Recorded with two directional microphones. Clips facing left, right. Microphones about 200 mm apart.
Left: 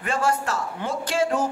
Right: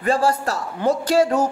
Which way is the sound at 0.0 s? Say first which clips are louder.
Right 5 dB; 35° right (ahead or behind).